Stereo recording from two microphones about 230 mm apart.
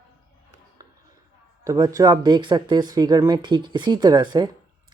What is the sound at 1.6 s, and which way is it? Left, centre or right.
Speech, centre.